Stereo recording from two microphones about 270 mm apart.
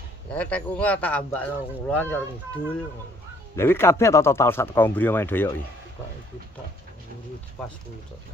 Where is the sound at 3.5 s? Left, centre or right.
Centre.